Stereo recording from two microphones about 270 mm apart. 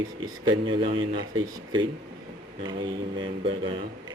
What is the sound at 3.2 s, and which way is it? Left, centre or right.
Speech, centre.